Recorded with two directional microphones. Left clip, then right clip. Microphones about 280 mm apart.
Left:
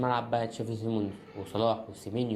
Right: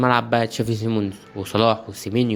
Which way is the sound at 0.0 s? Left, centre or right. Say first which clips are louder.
Right 10 dB; right.